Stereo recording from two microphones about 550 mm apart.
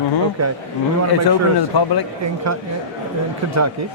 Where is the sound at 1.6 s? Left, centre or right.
Left.